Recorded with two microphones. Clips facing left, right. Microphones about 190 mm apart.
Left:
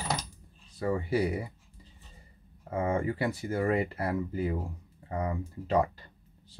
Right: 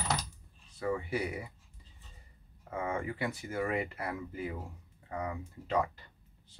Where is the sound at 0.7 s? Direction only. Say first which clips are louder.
Left 5 dB; 35° left (ahead or behind).